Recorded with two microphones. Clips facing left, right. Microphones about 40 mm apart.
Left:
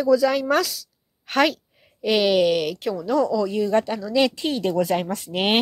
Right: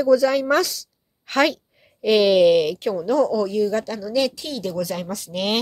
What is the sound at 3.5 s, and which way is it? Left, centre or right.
A woman's voice, left.